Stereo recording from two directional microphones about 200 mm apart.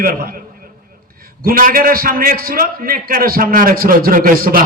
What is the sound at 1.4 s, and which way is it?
A man's voice, 45° right (ahead or behind).